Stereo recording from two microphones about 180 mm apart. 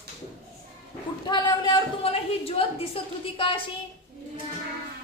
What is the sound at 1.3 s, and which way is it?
A woman's voice, 25° left (ahead or behind).